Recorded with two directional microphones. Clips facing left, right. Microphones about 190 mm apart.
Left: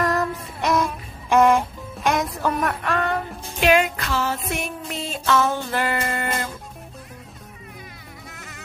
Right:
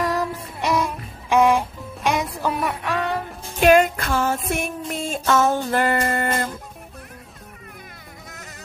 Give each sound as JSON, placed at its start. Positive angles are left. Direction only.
{"t": 0.0, "sound": "music", "side_deg": -10}
{"t": 3.5, "sound": "music", "side_deg": -45}
{"t": 8.3, "sound": "music", "side_deg": -40}